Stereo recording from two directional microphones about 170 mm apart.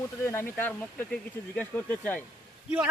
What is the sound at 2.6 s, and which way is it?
Speech, 5° right (ahead or behind).